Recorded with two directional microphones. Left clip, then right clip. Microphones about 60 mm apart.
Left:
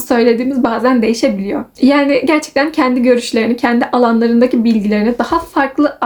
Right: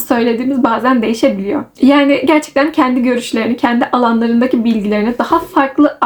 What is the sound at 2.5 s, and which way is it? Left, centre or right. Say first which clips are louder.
A woman's voice: right 1 dB; centre.